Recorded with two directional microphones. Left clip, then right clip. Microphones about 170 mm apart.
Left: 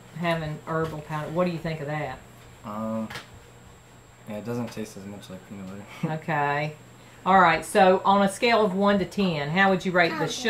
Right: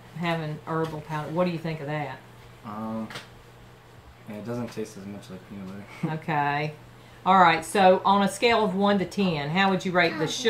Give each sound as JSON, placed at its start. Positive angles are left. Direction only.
{"t": 0.2, "sound": "speech", "side_deg": -15}
{"t": 2.7, "sound": "speech", "side_deg": 25}
{"t": 4.3, "sound": "speech", "side_deg": 25}
{"t": 6.0, "sound": "speech", "side_deg": -15}